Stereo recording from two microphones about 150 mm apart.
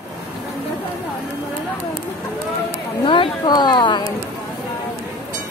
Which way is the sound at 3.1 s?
30° left (ahead or behind).